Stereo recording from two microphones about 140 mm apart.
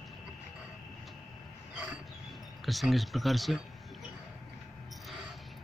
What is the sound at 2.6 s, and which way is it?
Speech, centre (ahead or behind).